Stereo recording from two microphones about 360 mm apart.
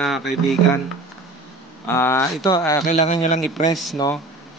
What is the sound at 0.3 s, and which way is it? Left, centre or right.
Speech, left.